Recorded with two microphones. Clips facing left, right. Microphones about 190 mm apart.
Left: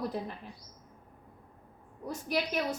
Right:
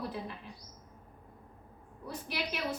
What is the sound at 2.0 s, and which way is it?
Speech, 45° left (ahead or behind).